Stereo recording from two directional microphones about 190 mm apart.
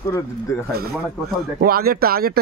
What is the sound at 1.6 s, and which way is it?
Speech, 50° right (ahead or behind).